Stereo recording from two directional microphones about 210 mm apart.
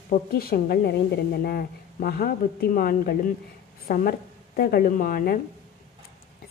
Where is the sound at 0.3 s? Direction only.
45° left (ahead or behind).